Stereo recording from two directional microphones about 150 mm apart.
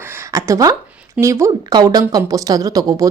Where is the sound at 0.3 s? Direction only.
20° right (ahead or behind).